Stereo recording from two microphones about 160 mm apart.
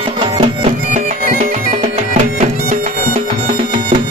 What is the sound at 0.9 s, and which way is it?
Bagpipes, 50° right (ahead or behind).